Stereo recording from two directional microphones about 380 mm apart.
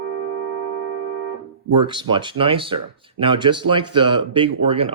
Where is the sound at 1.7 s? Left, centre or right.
Centre.